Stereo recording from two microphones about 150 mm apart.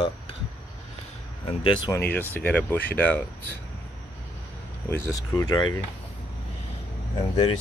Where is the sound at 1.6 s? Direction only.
35° left (ahead or behind).